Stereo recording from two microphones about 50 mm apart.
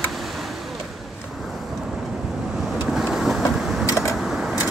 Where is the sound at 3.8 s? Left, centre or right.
Left.